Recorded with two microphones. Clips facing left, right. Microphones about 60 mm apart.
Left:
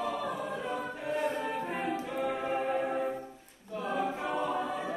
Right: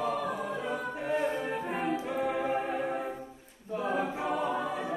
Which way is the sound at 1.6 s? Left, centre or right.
Centre.